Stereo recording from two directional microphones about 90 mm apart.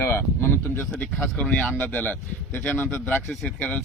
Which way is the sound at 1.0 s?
10° left (ahead or behind).